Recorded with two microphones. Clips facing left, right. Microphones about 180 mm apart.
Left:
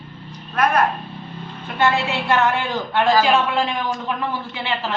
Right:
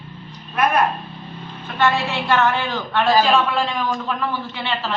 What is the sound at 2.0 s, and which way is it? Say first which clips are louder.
A man's voice: even; 15° left (ahead or behind).